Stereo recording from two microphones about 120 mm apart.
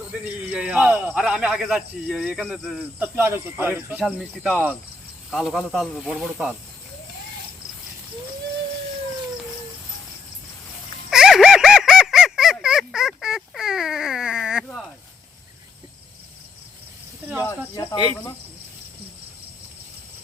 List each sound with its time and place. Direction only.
0.3 s a man's voice: 10° right (ahead or behind)
3.2 s a man's voice: 20° right (ahead or behind)
4.0 s speech: centre (ahead or behind)
11.1 s a sound: 5° right (ahead or behind)